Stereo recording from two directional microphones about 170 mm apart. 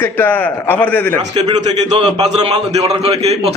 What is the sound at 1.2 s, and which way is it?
A man's voice, 40° right (ahead or behind).